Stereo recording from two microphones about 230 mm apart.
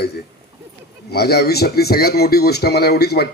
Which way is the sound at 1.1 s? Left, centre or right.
Left.